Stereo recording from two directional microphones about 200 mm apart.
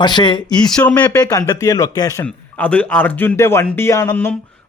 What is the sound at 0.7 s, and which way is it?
A man's voice, 5° left (ahead or behind).